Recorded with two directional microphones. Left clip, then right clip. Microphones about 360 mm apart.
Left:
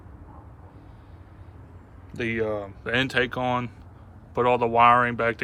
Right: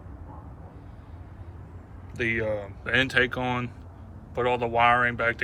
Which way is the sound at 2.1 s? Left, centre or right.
Centre.